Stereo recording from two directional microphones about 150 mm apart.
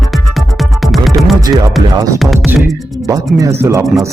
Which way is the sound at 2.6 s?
Centre (ahead or behind).